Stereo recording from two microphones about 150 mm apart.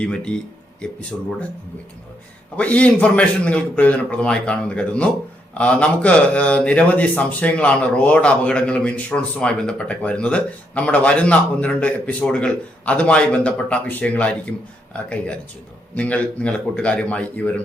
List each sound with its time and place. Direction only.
0.0 s speech: 5° left (ahead or behind)
2.6 s speech: 10° left (ahead or behind)
16.0 s speech: 10° left (ahead or behind)